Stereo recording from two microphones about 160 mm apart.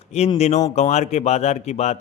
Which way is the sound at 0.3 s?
40° left (ahead or behind).